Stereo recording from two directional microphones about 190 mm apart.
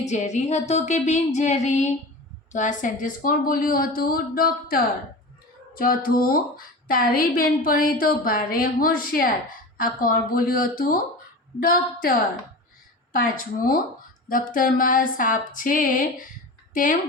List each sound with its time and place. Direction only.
0.0 s music: 40° left (ahead or behind)
2.5 s a woman's voice: 40° left (ahead or behind)
13.1 s a woman's voice: 50° left (ahead or behind)